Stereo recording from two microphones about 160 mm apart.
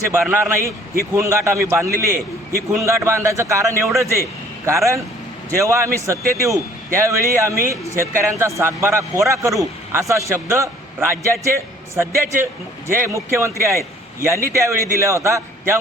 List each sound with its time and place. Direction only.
0.1 s a man's voice: 15° right (ahead or behind)